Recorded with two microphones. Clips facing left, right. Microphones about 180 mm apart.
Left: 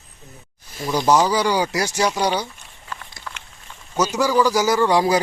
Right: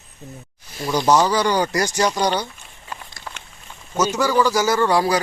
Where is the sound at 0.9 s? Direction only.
5° left (ahead or behind).